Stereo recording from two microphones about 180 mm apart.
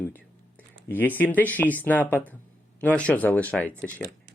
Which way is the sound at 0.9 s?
10° left (ahead or behind).